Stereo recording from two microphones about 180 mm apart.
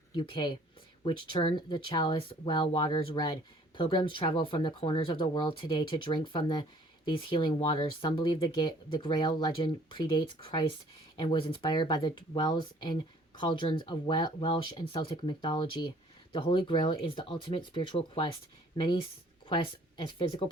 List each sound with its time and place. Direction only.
0.1 s speech: 25° left (ahead or behind)
19.5 s speech: 25° left (ahead or behind)